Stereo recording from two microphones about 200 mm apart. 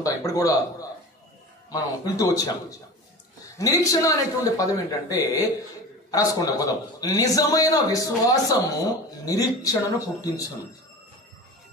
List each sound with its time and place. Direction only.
0.0 s a man's voice: 15° left (ahead or behind)